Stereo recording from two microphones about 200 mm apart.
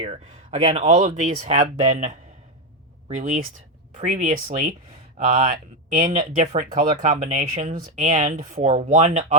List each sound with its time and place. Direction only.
0.0 s speech: 30° right (ahead or behind)
3.2 s speech: 35° right (ahead or behind)